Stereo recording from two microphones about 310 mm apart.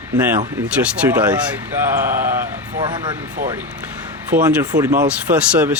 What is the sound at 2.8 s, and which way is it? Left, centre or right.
Speech, centre.